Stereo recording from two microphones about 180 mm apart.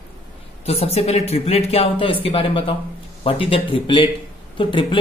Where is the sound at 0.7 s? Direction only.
35° left (ahead or behind).